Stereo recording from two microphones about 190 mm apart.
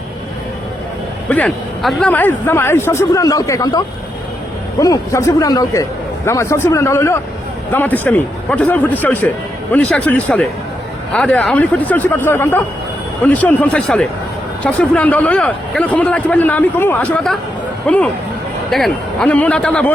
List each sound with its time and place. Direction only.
1.3 s a man's voice: 5° left (ahead or behind)